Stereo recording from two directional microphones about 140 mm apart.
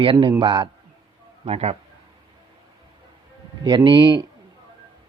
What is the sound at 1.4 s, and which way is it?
Speech, 50° right (ahead or behind).